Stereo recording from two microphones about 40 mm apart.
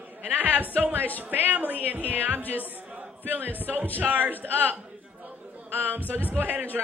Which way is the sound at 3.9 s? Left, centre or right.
Right.